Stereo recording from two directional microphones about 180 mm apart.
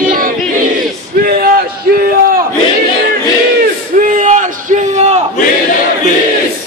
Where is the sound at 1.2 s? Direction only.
60° right (ahead or behind).